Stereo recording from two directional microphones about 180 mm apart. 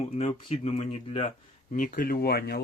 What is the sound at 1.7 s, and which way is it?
Speech, 50° left (ahead or behind).